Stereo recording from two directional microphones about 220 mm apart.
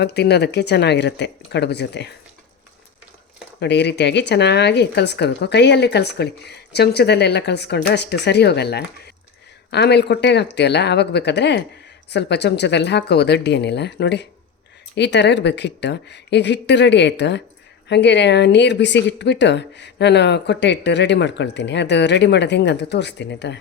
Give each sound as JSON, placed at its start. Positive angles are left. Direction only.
{"t": 0.0, "sound": "speech", "side_deg": 50}
{"t": 3.6, "sound": "speech", "side_deg": 50}